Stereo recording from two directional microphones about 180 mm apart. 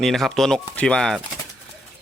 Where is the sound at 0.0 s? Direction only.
Centre (ahead or behind).